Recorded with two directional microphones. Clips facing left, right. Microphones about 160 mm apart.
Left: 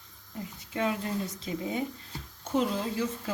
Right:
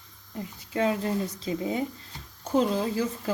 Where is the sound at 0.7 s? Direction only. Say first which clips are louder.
Right 4 dB; 35° right (ahead or behind).